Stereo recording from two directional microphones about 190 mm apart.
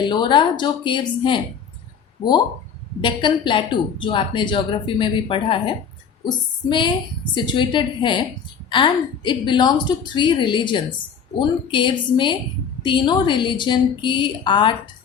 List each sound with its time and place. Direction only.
0.0 s a woman's voice: 25° left (ahead or behind)
3.0 s a woman's voice: 25° left (ahead or behind)